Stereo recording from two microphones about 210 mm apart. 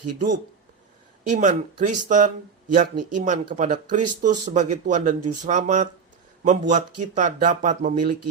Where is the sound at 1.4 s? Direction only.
35° right (ahead or behind).